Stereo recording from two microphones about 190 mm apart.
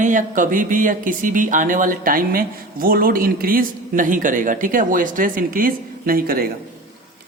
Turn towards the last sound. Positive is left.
turn(degrees=-50)  # may be behind; listen again after turning